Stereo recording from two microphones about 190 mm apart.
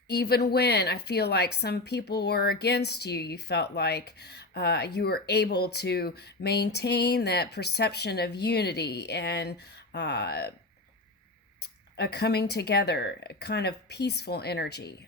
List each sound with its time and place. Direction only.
0.1 s a woman's voice: 60° left (ahead or behind)
11.6 s a woman's voice: 60° left (ahead or behind)